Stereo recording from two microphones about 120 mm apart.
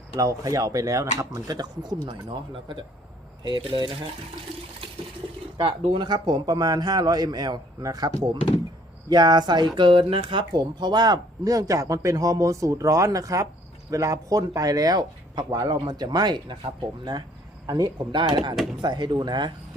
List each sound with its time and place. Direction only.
0.2 s a man's voice: 30° right (ahead or behind)
3.4 s a man's voice: 40° right (ahead or behind)
5.5 s a man's voice: 50° right (ahead or behind)
10.5 s a man's voice: 35° right (ahead or behind)
17.7 s a man's voice: 35° right (ahead or behind)